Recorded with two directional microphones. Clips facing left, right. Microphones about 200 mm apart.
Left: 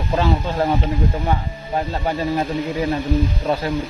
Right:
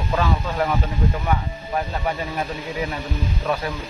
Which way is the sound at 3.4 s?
30° left (ahead or behind).